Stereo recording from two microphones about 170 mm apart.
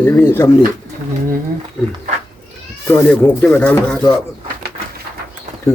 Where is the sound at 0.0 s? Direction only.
15° left (ahead or behind).